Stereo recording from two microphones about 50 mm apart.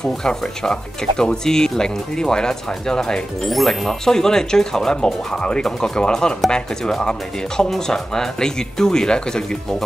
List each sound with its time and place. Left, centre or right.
0.0 s speech: centre